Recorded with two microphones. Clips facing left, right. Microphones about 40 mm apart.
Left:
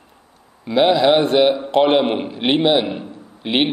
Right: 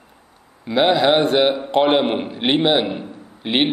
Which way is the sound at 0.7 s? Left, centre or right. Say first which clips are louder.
Left 2 dB; centre.